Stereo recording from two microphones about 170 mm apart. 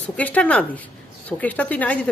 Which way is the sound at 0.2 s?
10° left (ahead or behind).